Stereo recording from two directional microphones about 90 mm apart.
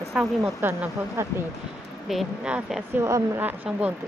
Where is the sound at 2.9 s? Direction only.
30° right (ahead or behind).